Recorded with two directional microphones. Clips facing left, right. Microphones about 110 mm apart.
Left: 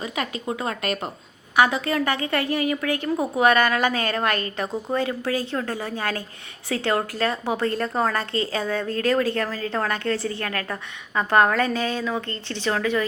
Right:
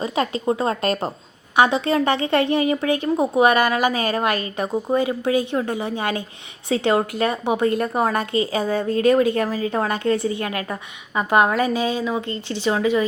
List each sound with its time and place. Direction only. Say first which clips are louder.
0.0 s speech: right 7 dB; 30° right (ahead or behind); by 13.1 s 15° right (ahead or behind)